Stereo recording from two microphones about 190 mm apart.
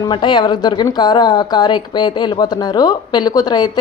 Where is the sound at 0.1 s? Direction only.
25° left (ahead or behind).